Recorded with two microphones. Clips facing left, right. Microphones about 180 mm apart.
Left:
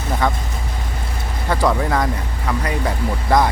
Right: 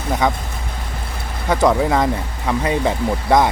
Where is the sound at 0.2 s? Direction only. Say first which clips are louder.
Right 1 dB; 15° right (ahead or behind).